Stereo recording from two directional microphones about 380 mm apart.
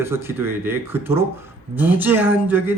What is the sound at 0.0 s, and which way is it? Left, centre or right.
Speech, centre.